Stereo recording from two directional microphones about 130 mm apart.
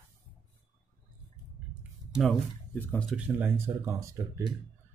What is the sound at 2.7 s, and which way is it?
Speech, 10° left (ahead or behind).